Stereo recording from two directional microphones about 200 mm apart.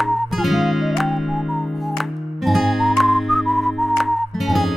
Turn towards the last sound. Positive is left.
turn(degrees=0)  # may be behind; listen again after turning